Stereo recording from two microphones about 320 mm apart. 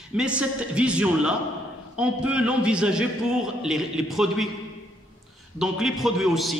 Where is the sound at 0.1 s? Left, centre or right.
Centre.